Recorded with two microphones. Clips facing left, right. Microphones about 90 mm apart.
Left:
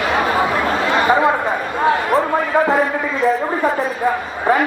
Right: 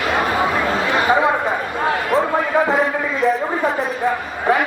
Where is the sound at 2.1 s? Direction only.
35° left (ahead or behind).